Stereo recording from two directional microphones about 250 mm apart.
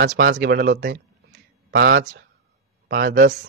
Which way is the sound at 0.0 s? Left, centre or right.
Right.